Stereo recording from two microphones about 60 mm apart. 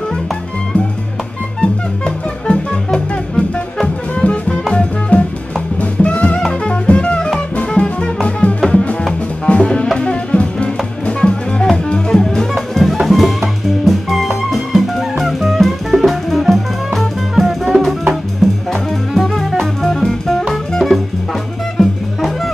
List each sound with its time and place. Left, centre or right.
1.6 s music: centre